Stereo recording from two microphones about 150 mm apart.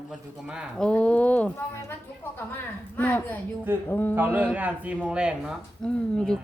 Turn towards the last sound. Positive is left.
turn(degrees=5)  # may be behind; listen again after turning